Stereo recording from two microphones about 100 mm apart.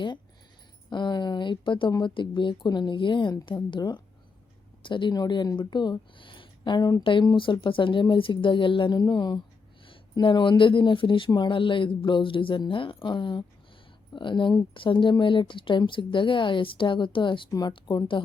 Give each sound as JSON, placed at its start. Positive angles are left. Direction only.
{"t": 0.9, "sound": "speech", "side_deg": 50}
{"t": 9.8, "sound": "a sound", "side_deg": 60}
{"t": 10.6, "sound": "speech", "side_deg": 55}
{"t": 11.3, "sound": "speech", "side_deg": 45}